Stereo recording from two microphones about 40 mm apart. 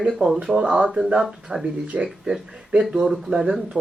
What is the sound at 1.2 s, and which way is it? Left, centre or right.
Speech, centre.